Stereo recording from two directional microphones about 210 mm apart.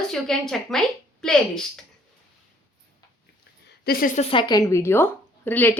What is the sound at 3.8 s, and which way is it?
Speech, 45° left (ahead or behind).